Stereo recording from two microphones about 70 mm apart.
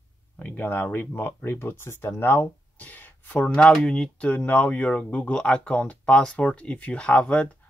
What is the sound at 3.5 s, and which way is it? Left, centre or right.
Speech, centre.